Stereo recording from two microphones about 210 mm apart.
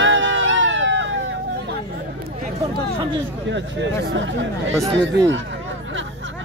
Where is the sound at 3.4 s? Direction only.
60° right (ahead or behind).